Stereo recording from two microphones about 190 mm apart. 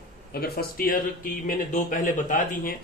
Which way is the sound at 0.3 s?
55° left (ahead or behind).